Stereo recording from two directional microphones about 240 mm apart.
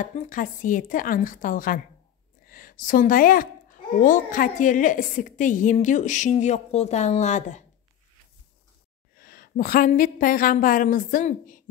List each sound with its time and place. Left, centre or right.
0.0 s a woman's voice: left
9.1 s a woman's voice: left